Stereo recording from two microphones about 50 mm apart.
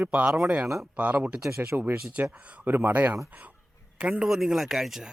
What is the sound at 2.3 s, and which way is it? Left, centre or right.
Speech, right.